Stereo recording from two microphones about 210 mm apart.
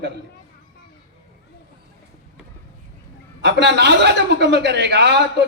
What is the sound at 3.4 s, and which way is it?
A man's voice, 55° right (ahead or behind).